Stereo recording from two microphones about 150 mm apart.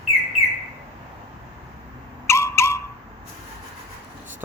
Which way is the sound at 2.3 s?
20° left (ahead or behind).